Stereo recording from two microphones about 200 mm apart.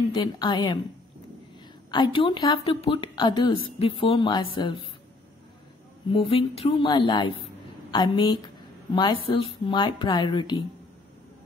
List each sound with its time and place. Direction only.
0.1 s a woman's voice: 20° left (ahead or behind)
1.9 s a woman's voice: 25° left (ahead or behind)
6.1 s a woman's voice: 30° left (ahead or behind)